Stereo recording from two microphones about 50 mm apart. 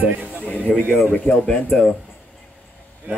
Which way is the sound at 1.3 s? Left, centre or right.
Left.